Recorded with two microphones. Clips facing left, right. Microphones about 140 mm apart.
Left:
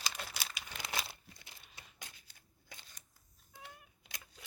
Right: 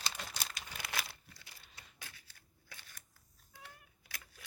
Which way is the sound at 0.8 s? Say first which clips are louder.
Left 2 dB; 20° left (ahead or behind).